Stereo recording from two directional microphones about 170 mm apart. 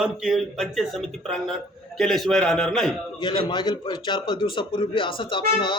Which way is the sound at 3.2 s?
25° left (ahead or behind).